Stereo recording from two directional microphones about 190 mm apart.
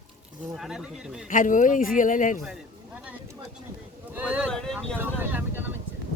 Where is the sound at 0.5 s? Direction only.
Centre (ahead or behind).